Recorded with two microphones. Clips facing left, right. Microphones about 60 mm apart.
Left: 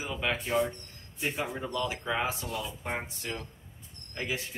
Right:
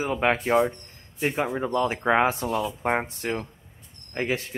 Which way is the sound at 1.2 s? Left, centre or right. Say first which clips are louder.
Right 8 dB; right.